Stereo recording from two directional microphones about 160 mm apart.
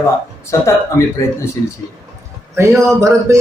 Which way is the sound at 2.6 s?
20° right (ahead or behind).